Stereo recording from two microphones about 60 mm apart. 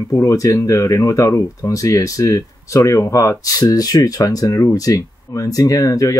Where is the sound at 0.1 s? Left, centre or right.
Left.